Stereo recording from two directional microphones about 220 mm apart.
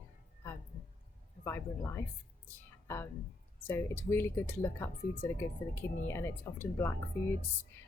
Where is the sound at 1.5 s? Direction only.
10° left (ahead or behind).